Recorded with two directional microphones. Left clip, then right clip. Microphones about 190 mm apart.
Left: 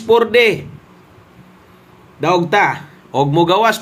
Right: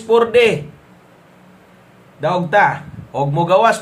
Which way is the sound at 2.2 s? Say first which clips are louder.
Left 1 dB; 40° left (ahead or behind).